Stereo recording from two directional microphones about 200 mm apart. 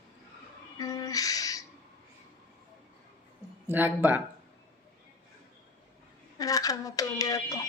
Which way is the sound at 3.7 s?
10° right (ahead or behind).